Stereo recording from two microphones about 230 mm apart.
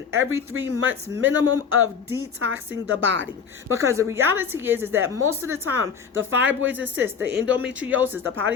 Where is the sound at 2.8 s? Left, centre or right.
Right.